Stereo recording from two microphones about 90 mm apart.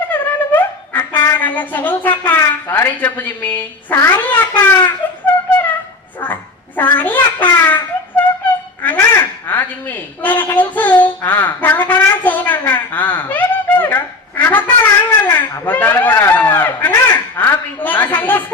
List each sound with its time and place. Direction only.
0.1 s wind instrument: 20° left (ahead or behind)
2.7 s a child's voice: 20° left (ahead or behind)
6.1 s a sound: 20° left (ahead or behind)